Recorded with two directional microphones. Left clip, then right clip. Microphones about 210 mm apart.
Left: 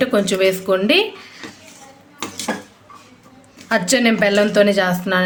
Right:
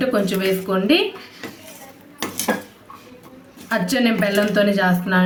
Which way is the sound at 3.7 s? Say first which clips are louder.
Left 4 dB; 50° left (ahead or behind).